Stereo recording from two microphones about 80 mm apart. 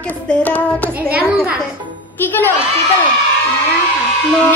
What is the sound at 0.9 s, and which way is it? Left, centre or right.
Speech, centre.